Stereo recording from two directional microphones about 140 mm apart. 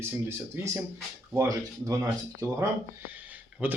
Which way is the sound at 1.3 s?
20° right (ahead or behind).